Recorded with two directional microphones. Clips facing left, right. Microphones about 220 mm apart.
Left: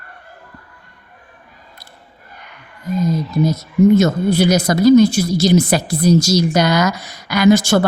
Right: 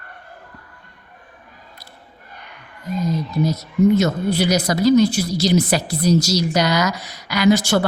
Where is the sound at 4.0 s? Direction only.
45° left (ahead or behind).